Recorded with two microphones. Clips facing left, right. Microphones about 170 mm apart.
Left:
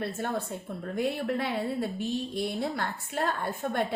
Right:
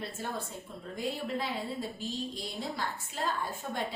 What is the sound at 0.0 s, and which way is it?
A woman's voice, 60° left (ahead or behind).